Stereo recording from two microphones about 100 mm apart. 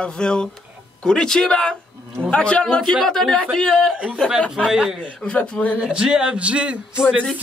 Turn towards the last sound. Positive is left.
turn(degrees=-5)  # may be behind; listen again after turning